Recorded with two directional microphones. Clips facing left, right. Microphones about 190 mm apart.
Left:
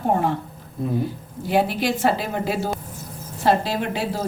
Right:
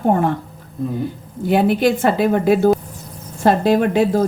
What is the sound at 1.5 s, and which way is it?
A woman's voice, 55° right (ahead or behind).